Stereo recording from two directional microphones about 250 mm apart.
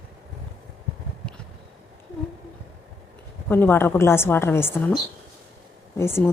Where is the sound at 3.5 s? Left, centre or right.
Centre.